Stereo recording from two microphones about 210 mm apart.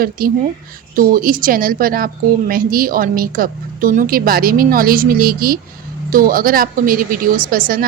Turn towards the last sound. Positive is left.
turn(degrees=-45)  # may be behind; listen again after turning